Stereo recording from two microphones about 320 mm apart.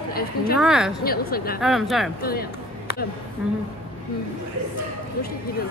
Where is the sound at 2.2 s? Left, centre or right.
Left.